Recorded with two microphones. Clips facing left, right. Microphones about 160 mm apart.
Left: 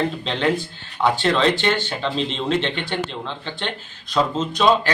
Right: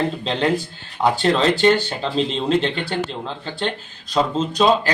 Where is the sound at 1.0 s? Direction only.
35° right (ahead or behind).